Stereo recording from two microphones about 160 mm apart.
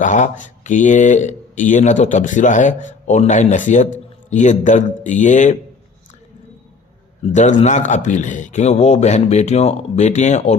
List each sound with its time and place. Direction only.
0.0 s speech: 50° left (ahead or behind)
7.6 s speech: 50° left (ahead or behind)